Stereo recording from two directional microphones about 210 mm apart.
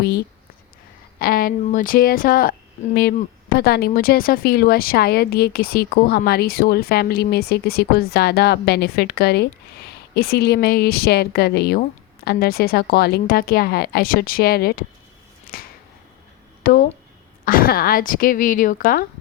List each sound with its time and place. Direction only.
1.2 s speech: 45° left (ahead or behind)
15.5 s finger snapping: 45° left (ahead or behind)
16.7 s speech: 45° left (ahead or behind)